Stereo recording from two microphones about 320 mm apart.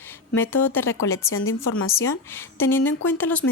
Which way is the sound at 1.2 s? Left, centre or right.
Left.